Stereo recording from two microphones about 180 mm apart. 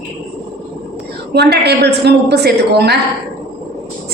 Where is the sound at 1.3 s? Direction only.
65° right (ahead or behind).